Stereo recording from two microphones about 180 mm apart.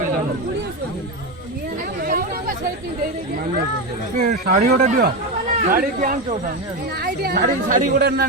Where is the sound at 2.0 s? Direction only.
50° right (ahead or behind).